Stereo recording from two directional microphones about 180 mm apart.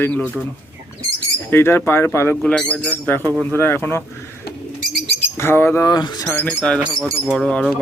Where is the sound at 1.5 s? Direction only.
15° left (ahead or behind).